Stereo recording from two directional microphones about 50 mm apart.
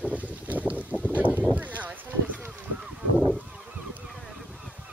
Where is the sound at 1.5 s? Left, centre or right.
Right.